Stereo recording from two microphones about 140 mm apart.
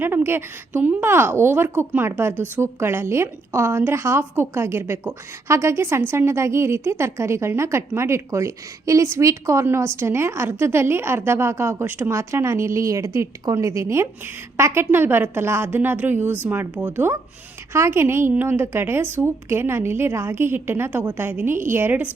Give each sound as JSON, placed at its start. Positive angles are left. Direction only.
{"t": 0.0, "sound": "a woman's voice", "side_deg": -15}